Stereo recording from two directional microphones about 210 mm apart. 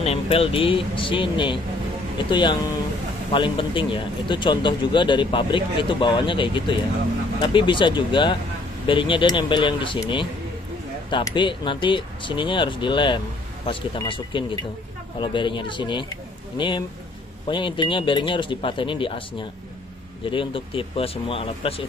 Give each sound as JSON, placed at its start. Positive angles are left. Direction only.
{"t": 0.0, "sound": "a man's voice", "side_deg": 30}
{"t": 20.2, "sound": "a man's voice", "side_deg": 25}